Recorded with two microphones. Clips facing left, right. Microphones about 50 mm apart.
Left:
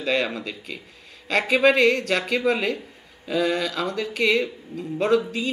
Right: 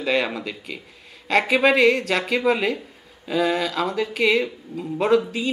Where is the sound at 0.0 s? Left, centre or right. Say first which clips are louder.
Right 1 dB; centre.